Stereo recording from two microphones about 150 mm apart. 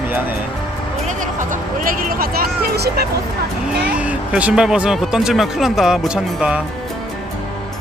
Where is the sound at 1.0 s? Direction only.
55° right (ahead or behind); by 3.1 s 90° right.